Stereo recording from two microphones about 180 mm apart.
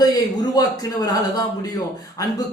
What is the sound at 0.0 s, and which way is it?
A man's voice, 20° left (ahead or behind).